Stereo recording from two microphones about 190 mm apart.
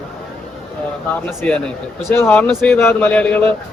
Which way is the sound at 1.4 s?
5° left (ahead or behind).